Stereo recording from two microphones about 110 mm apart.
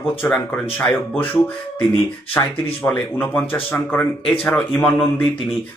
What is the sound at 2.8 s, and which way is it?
Speech, 15° left (ahead or behind).